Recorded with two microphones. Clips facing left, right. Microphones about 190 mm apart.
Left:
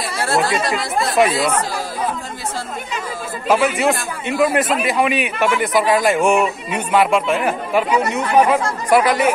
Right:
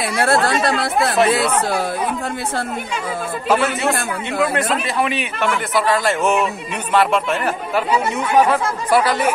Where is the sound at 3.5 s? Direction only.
15° left (ahead or behind).